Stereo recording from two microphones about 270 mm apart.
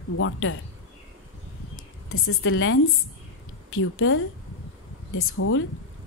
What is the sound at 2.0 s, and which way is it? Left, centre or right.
A woman's voice, left.